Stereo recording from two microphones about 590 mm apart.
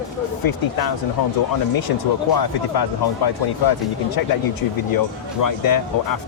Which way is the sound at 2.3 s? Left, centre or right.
Left.